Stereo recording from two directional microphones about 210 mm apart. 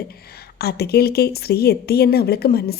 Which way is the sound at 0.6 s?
50° left (ahead or behind).